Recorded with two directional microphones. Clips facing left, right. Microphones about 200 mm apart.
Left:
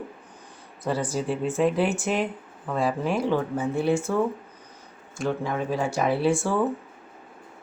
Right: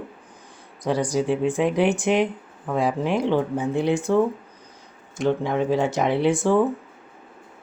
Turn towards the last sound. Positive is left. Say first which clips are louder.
# right 4 dB
turn(degrees=-20)  # may be behind; listen again after turning